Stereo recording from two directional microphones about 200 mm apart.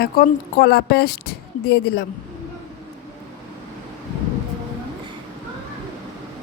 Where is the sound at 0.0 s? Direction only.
55° left (ahead or behind).